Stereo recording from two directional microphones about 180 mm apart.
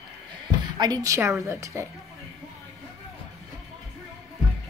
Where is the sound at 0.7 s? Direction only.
20° right (ahead or behind).